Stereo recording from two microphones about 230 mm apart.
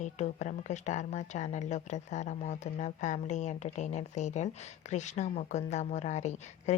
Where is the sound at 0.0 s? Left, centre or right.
Left.